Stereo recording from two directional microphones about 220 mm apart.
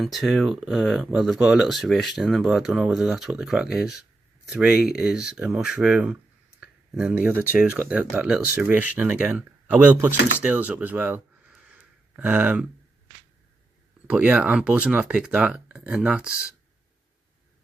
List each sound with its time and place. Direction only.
0.0 s speech: centre (ahead or behind)
6.6 s a sound: 5° right (ahead or behind)
7.5 s speech: 5° right (ahead or behind)
14.1 s speech: 5° right (ahead or behind)